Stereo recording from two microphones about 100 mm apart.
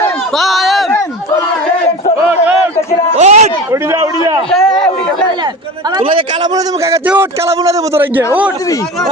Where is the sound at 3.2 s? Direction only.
90° right.